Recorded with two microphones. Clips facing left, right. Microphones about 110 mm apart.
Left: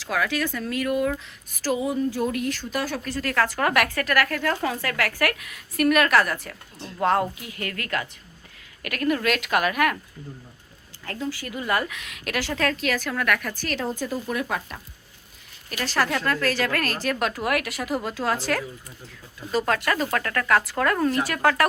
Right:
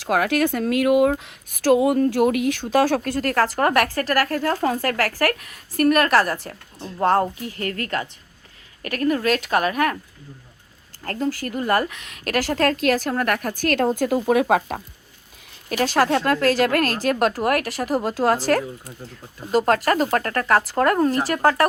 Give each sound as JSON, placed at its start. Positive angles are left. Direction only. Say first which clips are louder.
{"t": 0.0, "sound": "speech", "louder": "right 6 dB", "side_deg": -55}
{"t": 3.0, "sound": "a woman's voice", "louder": "right 4 dB", "side_deg": -50}
{"t": 11.0, "sound": "speech", "louder": "right 6 dB", "side_deg": -45}
{"t": 14.3, "sound": "speech", "louder": "right 10 dB", "side_deg": -90}
{"t": 15.7, "sound": "a woman's voice", "louder": "right 6 dB", "side_deg": -50}